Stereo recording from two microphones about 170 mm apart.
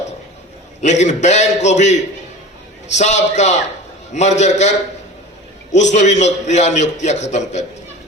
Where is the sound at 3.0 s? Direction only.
40° left (ahead or behind).